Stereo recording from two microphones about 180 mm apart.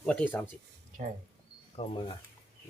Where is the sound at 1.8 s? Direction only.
25° left (ahead or behind).